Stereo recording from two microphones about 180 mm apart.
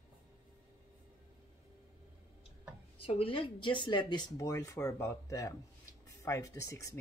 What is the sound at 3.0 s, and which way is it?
Speech, 30° left (ahead or behind).